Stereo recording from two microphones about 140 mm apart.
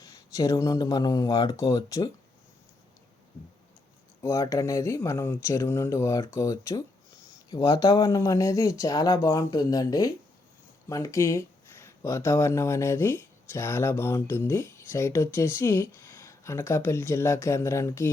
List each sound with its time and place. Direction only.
0.0 s speech: 25° left (ahead or behind)
4.2 s speech: 25° left (ahead or behind)